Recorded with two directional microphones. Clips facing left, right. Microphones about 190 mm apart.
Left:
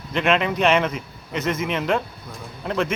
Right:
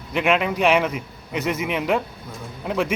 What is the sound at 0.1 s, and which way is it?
A man's voice, 10° right (ahead or behind).